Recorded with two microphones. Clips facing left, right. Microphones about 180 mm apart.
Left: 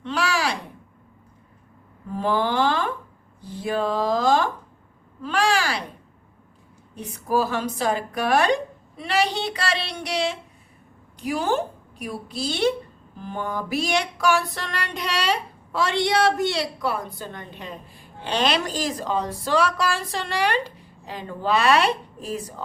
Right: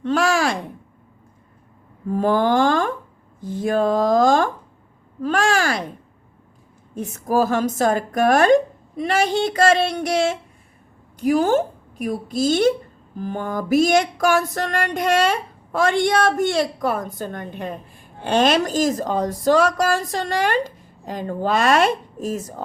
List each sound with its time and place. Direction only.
0.0 s speech: 45° right (ahead or behind)
2.1 s music: 45° right (ahead or behind)
5.2 s a sound: 50° right (ahead or behind)
6.9 s music: 45° right (ahead or behind)
11.2 s a woman's voice: 45° right (ahead or behind)
13.1 s music: 45° right (ahead or behind)